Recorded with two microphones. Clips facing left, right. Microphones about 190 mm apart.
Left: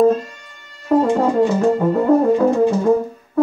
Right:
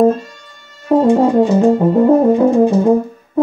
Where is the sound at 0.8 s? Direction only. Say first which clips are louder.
Right 4 dB; 20° right (ahead or behind).